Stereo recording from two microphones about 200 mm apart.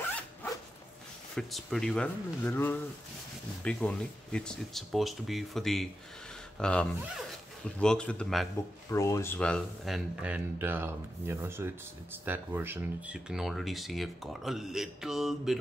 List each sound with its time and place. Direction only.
1.3 s speech: centre (ahead or behind)
8.9 s speech: 15° left (ahead or behind); by 15.5 s centre (ahead or behind)